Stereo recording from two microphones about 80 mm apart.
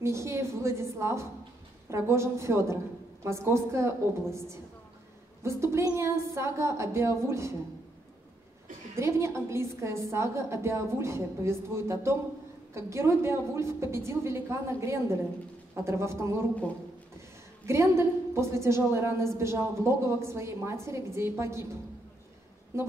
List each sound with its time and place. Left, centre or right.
0.0 s a woman's voice: right
8.9 s a woman's voice: right
17.6 s a woman's voice: right